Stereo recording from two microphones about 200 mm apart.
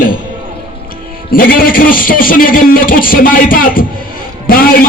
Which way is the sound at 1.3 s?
45° left (ahead or behind).